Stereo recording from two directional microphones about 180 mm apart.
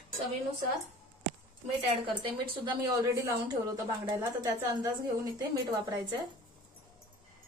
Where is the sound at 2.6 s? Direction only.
25° right (ahead or behind).